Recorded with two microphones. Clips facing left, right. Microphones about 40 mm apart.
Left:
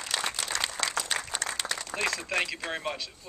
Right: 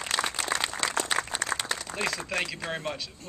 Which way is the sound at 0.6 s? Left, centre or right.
Centre.